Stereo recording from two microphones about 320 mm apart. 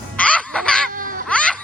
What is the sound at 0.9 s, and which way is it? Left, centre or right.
Baby laughter, right.